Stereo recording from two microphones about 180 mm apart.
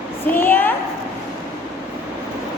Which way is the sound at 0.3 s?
10° left (ahead or behind).